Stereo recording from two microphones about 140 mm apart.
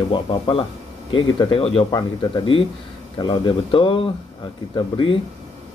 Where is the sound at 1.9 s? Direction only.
30° left (ahead or behind).